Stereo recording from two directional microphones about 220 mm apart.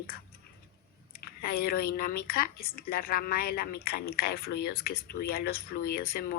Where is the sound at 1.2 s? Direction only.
45° left (ahead or behind).